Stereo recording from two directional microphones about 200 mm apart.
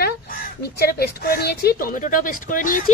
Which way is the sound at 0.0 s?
50° left (ahead or behind).